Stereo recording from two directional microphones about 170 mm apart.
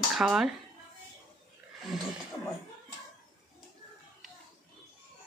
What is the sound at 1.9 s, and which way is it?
Speech, 5° right (ahead or behind).